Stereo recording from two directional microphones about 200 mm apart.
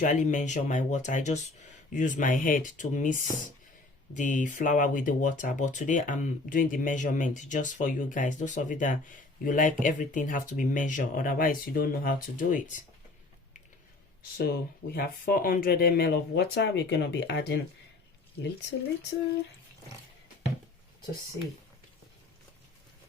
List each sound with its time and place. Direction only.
0.0 s speech: 40° left (ahead or behind)
14.3 s speech: 50° left (ahead or behind)